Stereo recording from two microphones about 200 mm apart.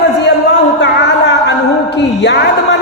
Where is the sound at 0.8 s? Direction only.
60° left (ahead or behind).